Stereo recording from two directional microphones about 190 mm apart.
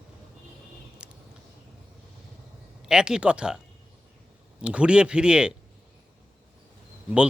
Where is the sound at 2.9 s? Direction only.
5° right (ahead or behind).